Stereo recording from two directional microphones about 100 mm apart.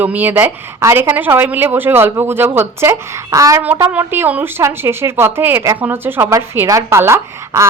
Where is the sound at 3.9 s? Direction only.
20° right (ahead or behind).